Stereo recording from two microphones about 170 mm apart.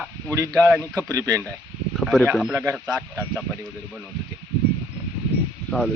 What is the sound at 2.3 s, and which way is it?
Speech, centre (ahead or behind).